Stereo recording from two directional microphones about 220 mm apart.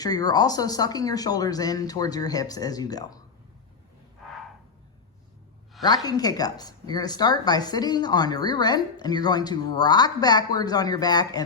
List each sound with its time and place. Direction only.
0.0 s a woman's voice: 15° left (ahead or behind)
5.8 s a woman's voice: 20° left (ahead or behind)